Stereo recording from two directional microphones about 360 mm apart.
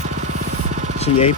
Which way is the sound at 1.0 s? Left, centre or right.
Centre.